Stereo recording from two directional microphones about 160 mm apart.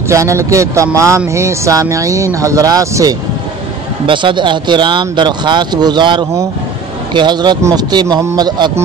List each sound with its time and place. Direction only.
0.1 s speech: 20° right (ahead or behind)
4.0 s speech: 30° right (ahead or behind)